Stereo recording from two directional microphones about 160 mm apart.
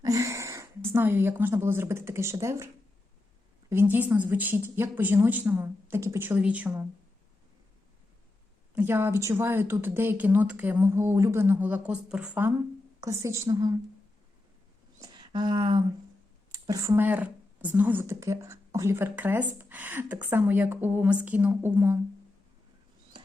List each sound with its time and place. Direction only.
0.0 s a sound: 20° right (ahead or behind)
0.9 s speech: 15° right (ahead or behind)
3.7 s speech: 15° right (ahead or behind)
8.7 s a woman's voice: 15° right (ahead or behind)
15.0 s a woman's voice: 25° right (ahead or behind); by 21.9 s 10° right (ahead or behind)